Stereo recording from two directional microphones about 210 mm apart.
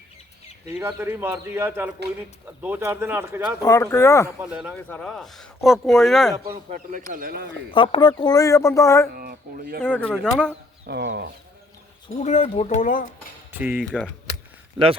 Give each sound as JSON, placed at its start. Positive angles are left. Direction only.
{"t": 0.8, "sound": "speech", "side_deg": -10}
{"t": 3.6, "sound": "speech", "side_deg": 15}
{"t": 6.7, "sound": "speech", "side_deg": -40}
{"t": 7.1, "sound": "chicken", "side_deg": -45}
{"t": 7.7, "sound": "speech", "side_deg": 25}
{"t": 9.1, "sound": "speech", "side_deg": -45}
{"t": 9.8, "sound": "speech", "side_deg": 10}
{"t": 10.8, "sound": "chicken", "side_deg": -55}
{"t": 12.2, "sound": "speech", "side_deg": 35}
{"t": 13.5, "sound": "speech", "side_deg": -10}